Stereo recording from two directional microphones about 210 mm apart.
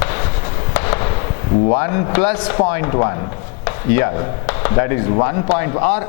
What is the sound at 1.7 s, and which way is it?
Speech, 15° left (ahead or behind).